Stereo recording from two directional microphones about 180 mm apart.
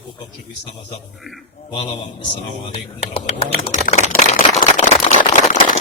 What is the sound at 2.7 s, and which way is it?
Speech, 30° left (ahead or behind).